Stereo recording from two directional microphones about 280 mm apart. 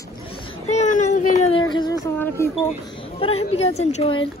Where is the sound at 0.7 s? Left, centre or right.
Left.